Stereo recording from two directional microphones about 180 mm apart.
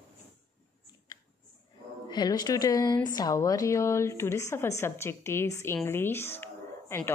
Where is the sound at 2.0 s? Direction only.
25° left (ahead or behind).